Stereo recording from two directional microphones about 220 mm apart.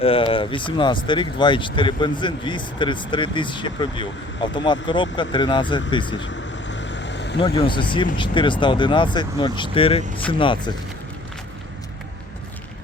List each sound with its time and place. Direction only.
0.0 s speech: 25° left (ahead or behind)
6.1 s vehicle: 55° left (ahead or behind)
7.3 s speech: 25° left (ahead or behind)